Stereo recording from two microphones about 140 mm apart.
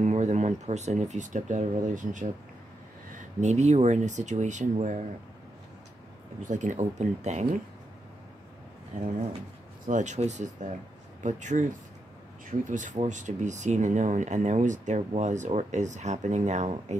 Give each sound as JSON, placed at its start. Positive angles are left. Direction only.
{"t": 0.0, "sound": "speech", "side_deg": -55}
{"t": 6.4, "sound": "speech", "side_deg": -65}
{"t": 9.8, "sound": "speech", "side_deg": -60}